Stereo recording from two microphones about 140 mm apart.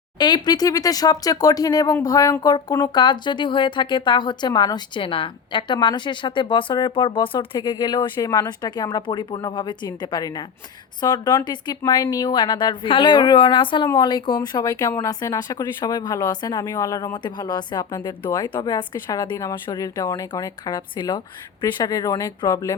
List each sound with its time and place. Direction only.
0.2 s a woman's voice: 30° left (ahead or behind)